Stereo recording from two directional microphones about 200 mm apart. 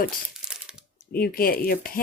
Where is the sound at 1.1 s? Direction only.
45° left (ahead or behind).